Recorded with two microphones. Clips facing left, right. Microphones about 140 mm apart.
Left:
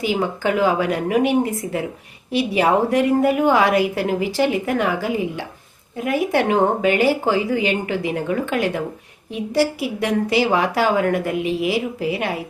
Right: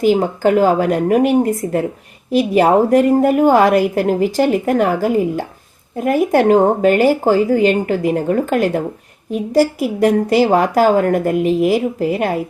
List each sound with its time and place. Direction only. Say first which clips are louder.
0.0 s a woman's voice: right 7 dB; 45° right (ahead or behind)